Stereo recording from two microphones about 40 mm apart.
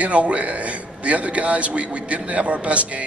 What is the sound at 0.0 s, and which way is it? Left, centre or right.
A man's voice, right.